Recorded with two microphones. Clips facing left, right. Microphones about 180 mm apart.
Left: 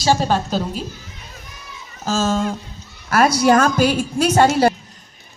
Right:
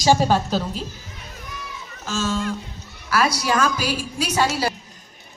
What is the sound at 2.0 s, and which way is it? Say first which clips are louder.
Speech: left 5 dB; 40° left (ahead or behind).